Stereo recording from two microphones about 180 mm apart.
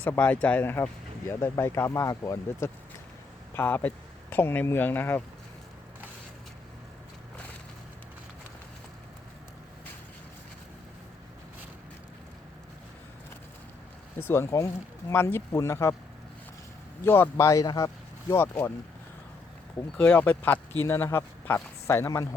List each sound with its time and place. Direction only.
0.0 s speech: 10° left (ahead or behind)
14.2 s speech: 15° left (ahead or behind)
17.0 s speech: 15° left (ahead or behind)
20.0 s speech: 10° left (ahead or behind)